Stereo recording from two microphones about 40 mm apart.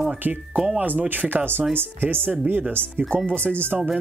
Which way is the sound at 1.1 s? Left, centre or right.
Right.